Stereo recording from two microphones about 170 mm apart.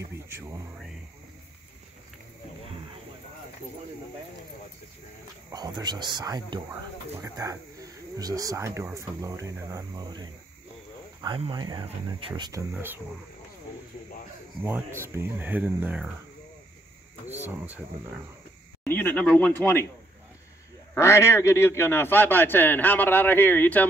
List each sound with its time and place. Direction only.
5.5 s speech: 25° right (ahead or behind)
15.0 s speech: 10° right (ahead or behind)
18.9 s a man's voice: 10° left (ahead or behind)
20.9 s a man's voice: 15° left (ahead or behind)